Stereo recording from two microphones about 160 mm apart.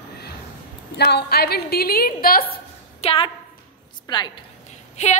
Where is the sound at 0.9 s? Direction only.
85° left; by 2.4 s 65° left (ahead or behind).